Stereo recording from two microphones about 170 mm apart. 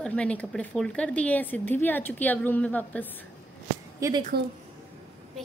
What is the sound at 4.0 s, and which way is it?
Speech, 20° right (ahead or behind).